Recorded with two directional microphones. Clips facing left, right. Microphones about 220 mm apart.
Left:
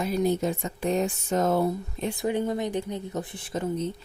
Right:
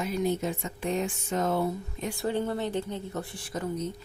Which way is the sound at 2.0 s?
15° left (ahead or behind).